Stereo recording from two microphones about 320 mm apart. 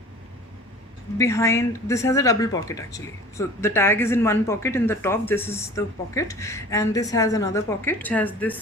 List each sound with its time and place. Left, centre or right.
1.2 s speech: centre